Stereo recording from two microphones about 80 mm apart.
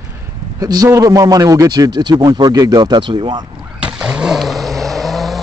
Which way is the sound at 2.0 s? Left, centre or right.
Right.